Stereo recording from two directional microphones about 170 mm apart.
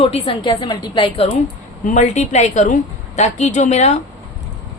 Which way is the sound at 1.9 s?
45° left (ahead or behind).